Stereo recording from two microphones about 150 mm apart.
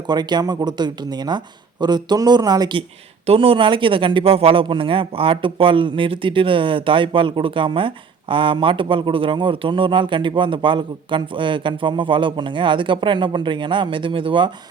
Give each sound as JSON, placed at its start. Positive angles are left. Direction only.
{"t": 0.1, "sound": "speech", "side_deg": -30}